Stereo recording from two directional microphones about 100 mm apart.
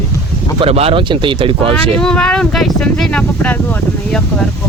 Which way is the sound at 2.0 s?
10° left (ahead or behind).